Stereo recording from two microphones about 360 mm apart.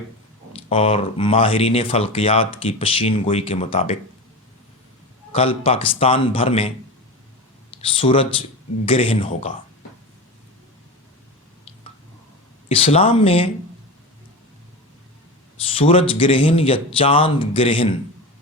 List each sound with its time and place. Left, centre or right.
0.5 s speech: centre
5.3 s speech: centre
7.8 s speech: centre
12.6 s speech: centre
15.7 s speech: centre